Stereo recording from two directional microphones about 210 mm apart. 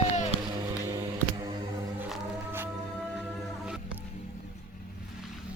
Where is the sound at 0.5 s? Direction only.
15° right (ahead or behind).